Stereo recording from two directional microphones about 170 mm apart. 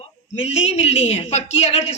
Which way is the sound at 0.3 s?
35° left (ahead or behind).